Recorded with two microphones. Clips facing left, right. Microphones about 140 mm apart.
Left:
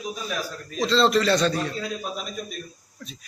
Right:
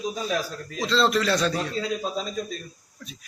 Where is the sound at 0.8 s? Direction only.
Centre (ahead or behind).